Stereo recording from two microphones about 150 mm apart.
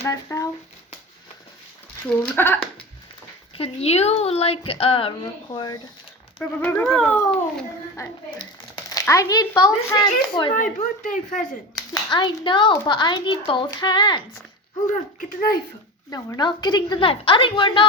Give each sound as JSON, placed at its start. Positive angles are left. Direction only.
{"t": 0.0, "sound": "speech", "side_deg": 20}
{"t": 2.0, "sound": "speech", "side_deg": 10}
{"t": 3.5, "sound": "speech", "side_deg": 40}
{"t": 6.4, "sound": "speech", "side_deg": 10}
{"t": 8.4, "sound": "speech", "side_deg": 25}
{"t": 10.5, "sound": "speech", "side_deg": 60}
{"t": 11.7, "sound": "speech", "side_deg": 30}
{"t": 15.2, "sound": "speech", "side_deg": 65}
{"t": 16.0, "sound": "speech", "side_deg": 20}